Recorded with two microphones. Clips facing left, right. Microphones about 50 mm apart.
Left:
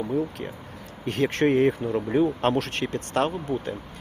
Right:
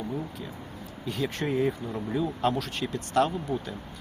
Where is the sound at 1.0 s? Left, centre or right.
Left.